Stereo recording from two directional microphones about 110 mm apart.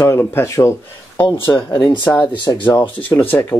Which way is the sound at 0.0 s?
20° left (ahead or behind).